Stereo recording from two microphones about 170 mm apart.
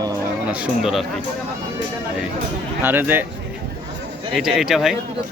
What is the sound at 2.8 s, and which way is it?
Speech, 10° right (ahead or behind).